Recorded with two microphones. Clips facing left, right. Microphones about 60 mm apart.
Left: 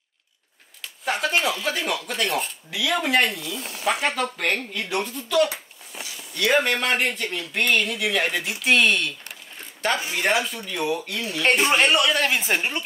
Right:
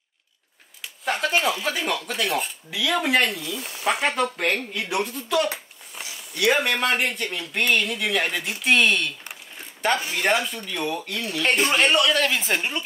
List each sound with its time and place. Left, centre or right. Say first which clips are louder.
1.0 s speech: even; centre
3.9 s speech: even; centre
4.2 s speech: right 1 dB; centre